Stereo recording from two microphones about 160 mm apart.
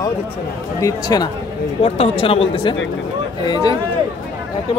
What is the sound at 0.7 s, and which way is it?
Speech, 20° left (ahead or behind).